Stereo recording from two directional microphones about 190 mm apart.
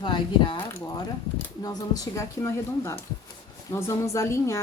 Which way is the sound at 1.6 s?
20° left (ahead or behind).